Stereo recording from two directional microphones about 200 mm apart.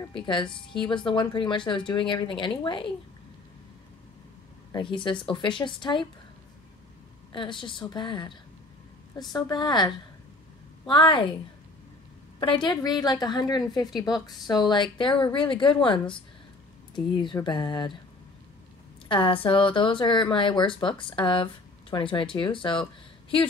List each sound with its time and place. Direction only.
0.0 s a woman's voice: 25° left (ahead or behind)
4.7 s a woman's voice: 25° left (ahead or behind)
7.3 s a woman's voice: 25° left (ahead or behind)
10.9 s a woman's voice: 25° left (ahead or behind)
12.4 s a woman's voice: 25° left (ahead or behind)
19.0 s a woman's voice: 25° left (ahead or behind)